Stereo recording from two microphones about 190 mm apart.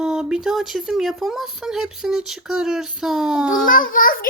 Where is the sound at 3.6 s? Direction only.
45° left (ahead or behind).